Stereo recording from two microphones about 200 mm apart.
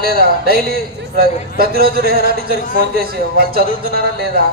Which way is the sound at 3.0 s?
50° right (ahead or behind).